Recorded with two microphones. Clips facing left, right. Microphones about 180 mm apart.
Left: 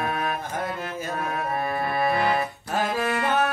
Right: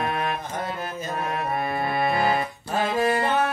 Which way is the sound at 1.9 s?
25° right (ahead or behind).